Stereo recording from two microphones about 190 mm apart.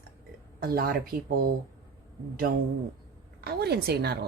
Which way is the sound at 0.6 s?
50° right (ahead or behind).